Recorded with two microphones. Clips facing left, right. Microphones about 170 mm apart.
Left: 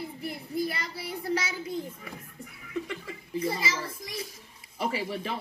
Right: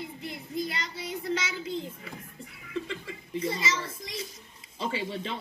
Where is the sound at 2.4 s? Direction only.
25° right (ahead or behind).